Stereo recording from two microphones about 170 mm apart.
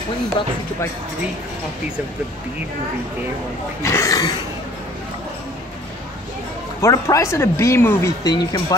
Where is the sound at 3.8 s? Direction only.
20° left (ahead or behind).